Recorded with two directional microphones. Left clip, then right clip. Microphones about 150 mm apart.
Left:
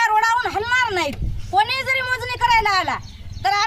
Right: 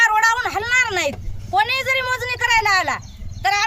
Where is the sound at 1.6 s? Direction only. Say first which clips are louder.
Even; 25° right (ahead or behind).